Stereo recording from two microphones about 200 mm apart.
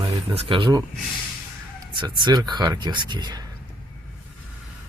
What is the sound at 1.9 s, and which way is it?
Speech, 20° right (ahead or behind).